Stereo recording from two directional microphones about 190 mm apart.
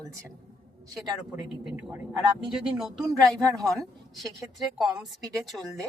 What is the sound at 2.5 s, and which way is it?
Speech, centre (ahead or behind).